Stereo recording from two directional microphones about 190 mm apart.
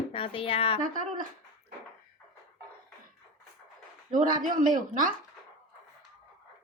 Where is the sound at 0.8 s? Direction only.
45° right (ahead or behind).